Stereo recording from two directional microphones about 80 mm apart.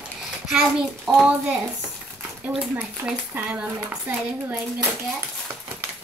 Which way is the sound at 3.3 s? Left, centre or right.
Centre.